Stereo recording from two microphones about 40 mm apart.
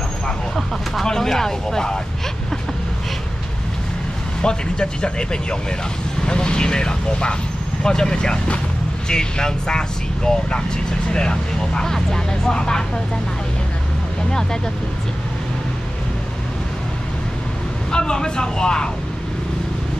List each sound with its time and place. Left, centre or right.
1.0 s speech: centre
4.4 s speech: left
17.9 s speech: left